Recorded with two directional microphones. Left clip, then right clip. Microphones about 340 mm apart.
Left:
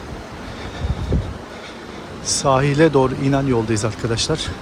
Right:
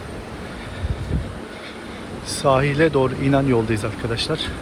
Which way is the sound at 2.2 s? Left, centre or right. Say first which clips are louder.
Left 1 dB; centre.